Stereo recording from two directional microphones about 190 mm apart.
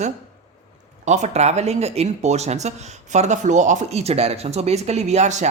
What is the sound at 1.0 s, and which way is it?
Speech, 35° right (ahead or behind).